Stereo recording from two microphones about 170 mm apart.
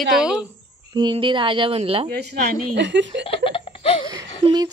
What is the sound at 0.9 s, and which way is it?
A woman's voice, 25° right (ahead or behind).